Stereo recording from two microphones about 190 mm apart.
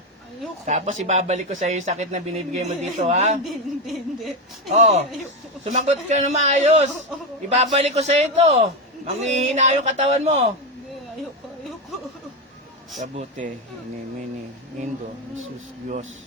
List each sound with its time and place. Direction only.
0.6 s speech: 40° right (ahead or behind)
3.4 s speech: centre (ahead or behind)
4.7 s speech: 35° right (ahead or behind)
13.0 s speech: 40° right (ahead or behind)